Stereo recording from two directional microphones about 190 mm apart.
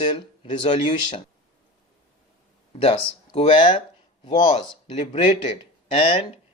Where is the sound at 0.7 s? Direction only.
25° left (ahead or behind).